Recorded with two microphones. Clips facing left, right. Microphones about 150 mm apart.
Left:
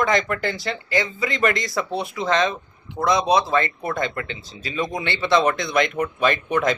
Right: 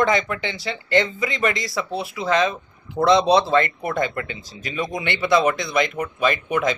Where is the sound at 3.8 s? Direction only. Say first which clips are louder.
Right 2 dB; 15° right (ahead or behind).